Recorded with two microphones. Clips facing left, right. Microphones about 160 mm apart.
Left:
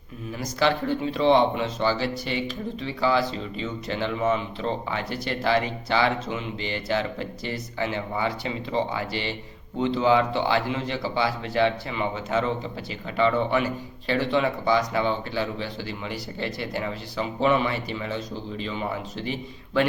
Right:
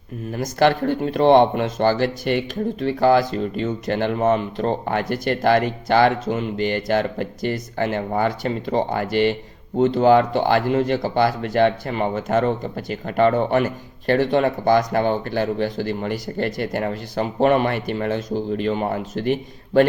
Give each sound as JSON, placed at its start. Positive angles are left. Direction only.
{"t": 0.3, "sound": "speech", "side_deg": -50}